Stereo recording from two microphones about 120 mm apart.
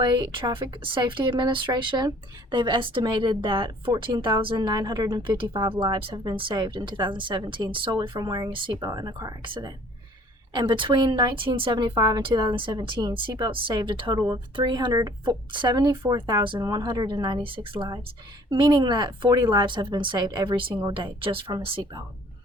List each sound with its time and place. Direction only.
0.0 s a woman's voice: 40° right (ahead or behind)
5.7 s a woman's voice: 50° right (ahead or behind)
8.9 s a woman's voice: 30° right (ahead or behind); by 21.8 s 45° right (ahead or behind)